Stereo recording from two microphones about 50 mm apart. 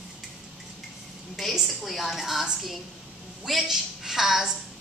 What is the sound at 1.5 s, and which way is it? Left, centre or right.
A woman's voice, centre.